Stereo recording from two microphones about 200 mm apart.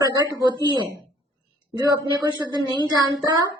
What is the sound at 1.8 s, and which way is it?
A woman's voice, 20° right (ahead or behind).